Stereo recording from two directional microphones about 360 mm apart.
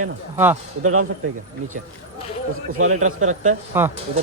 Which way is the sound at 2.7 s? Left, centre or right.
Right.